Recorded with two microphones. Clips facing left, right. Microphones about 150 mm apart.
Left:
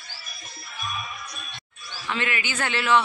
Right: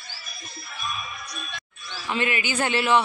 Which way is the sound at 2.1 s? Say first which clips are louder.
Right 3 dB; 15° right (ahead or behind).